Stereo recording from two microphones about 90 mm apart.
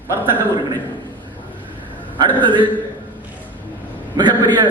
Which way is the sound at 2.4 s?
60° right (ahead or behind).